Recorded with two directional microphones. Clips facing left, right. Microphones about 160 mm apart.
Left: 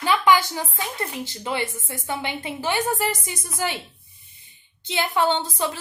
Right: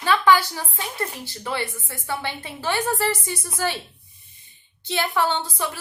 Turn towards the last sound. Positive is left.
turn(degrees=20)  # may be behind; listen again after turning